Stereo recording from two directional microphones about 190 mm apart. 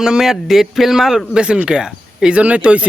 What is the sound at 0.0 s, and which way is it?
Speech, 5° right (ahead or behind).